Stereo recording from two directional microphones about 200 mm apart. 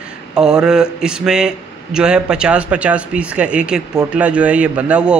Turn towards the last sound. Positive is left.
turn(degrees=-5)  # may be behind; listen again after turning